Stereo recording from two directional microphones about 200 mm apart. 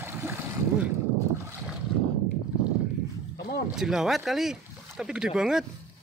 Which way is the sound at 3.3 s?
50° left (ahead or behind).